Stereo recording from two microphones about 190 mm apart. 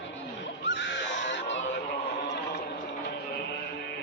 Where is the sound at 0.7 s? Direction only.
70° left (ahead or behind).